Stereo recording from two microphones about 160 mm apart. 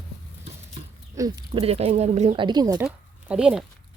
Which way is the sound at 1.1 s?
20° right (ahead or behind).